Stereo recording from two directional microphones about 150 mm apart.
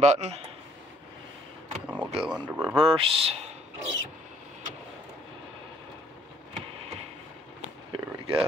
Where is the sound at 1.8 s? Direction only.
10° right (ahead or behind).